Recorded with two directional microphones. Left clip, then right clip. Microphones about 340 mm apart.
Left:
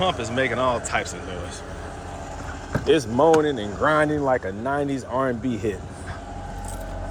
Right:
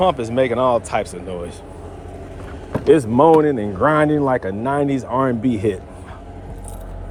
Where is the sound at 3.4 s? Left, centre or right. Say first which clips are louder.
Right 5 dB; centre.